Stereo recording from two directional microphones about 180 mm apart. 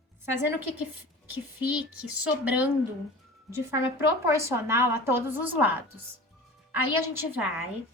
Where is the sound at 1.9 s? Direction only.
10° right (ahead or behind).